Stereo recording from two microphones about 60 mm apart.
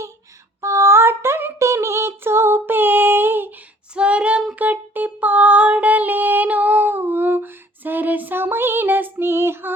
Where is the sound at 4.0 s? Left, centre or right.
Right.